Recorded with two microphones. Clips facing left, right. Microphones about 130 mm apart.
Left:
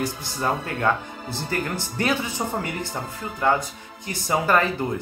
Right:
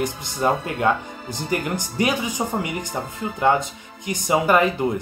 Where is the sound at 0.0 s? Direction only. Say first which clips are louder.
Right 4 dB; 20° right (ahead or behind).